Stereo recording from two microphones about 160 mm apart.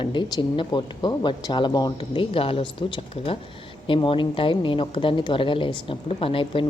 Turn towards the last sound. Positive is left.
turn(degrees=35)  # may be behind; listen again after turning